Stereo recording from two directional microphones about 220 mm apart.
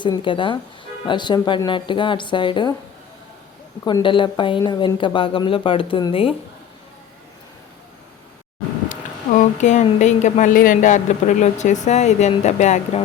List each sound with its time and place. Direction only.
0.0 s speech: 20° left (ahead or behind)
3.8 s speech: 20° left (ahead or behind)
9.4 s speech: 35° left (ahead or behind)